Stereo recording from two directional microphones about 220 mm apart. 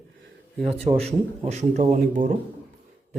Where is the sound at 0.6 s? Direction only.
25° right (ahead or behind).